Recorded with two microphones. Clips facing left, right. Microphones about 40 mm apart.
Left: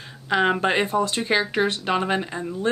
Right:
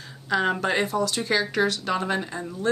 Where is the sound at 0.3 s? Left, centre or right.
Left.